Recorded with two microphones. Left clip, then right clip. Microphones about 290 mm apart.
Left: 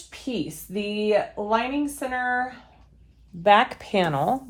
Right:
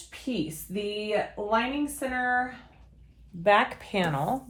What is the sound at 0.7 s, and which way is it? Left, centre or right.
Speech, left.